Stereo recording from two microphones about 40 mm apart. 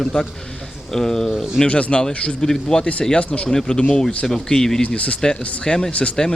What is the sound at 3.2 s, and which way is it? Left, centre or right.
Speech, left.